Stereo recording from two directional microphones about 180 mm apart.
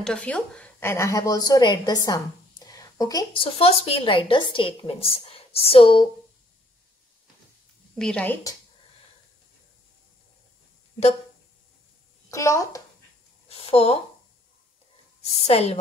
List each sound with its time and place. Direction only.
0.0 s a woman's voice: 5° left (ahead or behind); by 6.0 s 30° left (ahead or behind)
7.9 s a woman's voice: 5° left (ahead or behind)
12.3 s a woman's voice: 15° left (ahead or behind)
13.5 s a sound: 35° left (ahead or behind)
15.4 s speech: 35° left (ahead or behind)